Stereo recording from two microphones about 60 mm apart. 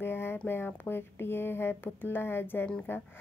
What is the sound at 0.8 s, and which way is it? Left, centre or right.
Speech, left.